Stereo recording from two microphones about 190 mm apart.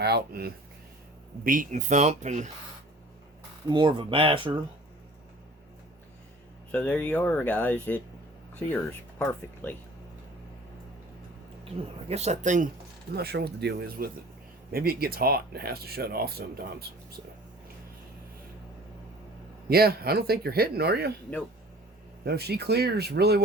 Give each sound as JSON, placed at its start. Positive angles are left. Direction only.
{"t": 0.0, "sound": "speech", "side_deg": -55}
{"t": 1.5, "sound": "speech", "side_deg": -45}
{"t": 3.7, "sound": "speech", "side_deg": -25}
{"t": 6.7, "sound": "speech", "side_deg": 10}
{"t": 12.0, "sound": "speech", "side_deg": -35}
{"t": 13.1, "sound": "speech", "side_deg": -60}
{"t": 19.7, "sound": "speech", "side_deg": -55}
{"t": 22.2, "sound": "speech", "side_deg": -55}